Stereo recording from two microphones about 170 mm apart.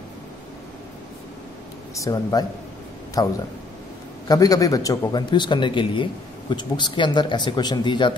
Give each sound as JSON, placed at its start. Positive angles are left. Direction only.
{"t": 2.0, "sound": "speech", "side_deg": 20}